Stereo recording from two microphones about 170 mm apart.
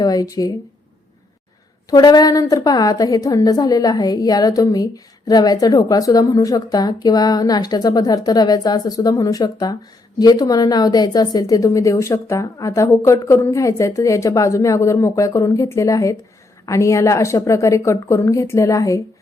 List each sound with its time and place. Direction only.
0.0 s speech: 20° left (ahead or behind)
1.9 s a woman's voice: 25° left (ahead or behind)